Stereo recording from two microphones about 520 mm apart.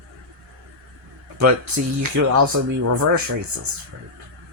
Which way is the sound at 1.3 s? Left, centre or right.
Right.